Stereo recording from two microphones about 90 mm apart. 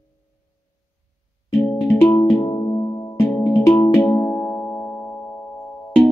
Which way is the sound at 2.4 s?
35° left (ahead or behind).